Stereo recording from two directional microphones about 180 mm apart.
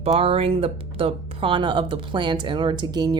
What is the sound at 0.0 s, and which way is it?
Speech, 35° right (ahead or behind).